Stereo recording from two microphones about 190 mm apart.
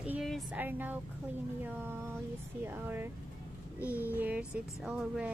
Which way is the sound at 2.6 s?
10° right (ahead or behind).